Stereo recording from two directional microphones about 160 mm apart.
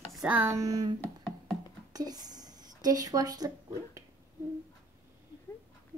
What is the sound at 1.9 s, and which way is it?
Speech, 25° right (ahead or behind).